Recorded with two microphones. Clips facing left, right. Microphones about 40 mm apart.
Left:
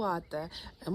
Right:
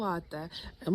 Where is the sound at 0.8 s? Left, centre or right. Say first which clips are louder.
Right 5 dB; right.